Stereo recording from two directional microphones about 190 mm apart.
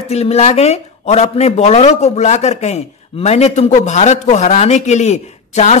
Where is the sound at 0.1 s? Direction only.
35° left (ahead or behind).